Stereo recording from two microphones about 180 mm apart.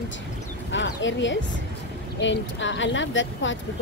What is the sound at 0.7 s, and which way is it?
Speech, 90° left.